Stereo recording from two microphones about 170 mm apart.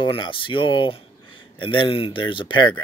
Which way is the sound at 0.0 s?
30° left (ahead or behind).